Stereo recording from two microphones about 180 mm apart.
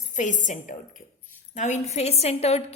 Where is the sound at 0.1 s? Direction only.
45° left (ahead or behind).